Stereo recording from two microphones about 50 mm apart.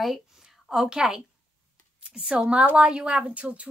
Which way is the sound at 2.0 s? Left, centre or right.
Centre.